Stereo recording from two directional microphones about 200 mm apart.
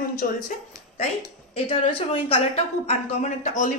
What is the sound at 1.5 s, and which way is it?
A woman's voice, 30° left (ahead or behind).